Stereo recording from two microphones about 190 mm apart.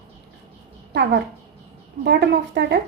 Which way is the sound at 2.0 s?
60° right (ahead or behind).